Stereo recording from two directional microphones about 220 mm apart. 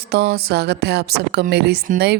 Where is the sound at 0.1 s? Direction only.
45° right (ahead or behind).